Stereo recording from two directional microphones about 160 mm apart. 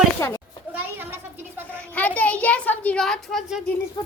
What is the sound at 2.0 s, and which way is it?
A child's voice, 10° left (ahead or behind).